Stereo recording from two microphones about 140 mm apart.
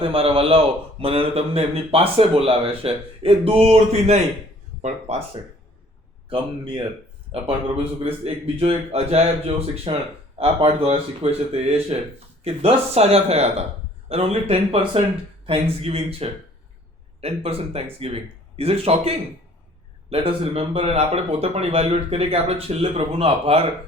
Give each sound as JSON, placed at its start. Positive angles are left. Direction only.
{"t": 0.0, "sound": "a man's voice", "side_deg": -45}
{"t": 6.2, "sound": "a man's voice", "side_deg": -40}